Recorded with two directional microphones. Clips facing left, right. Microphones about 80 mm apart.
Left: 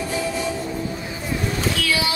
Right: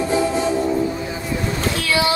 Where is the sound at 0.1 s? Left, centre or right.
Right.